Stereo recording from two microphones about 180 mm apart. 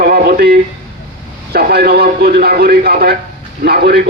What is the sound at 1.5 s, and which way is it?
A man's voice, 60° right (ahead or behind).